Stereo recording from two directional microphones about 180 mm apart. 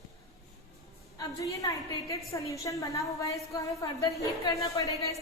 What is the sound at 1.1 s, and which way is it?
A woman's voice, 20° left (ahead or behind).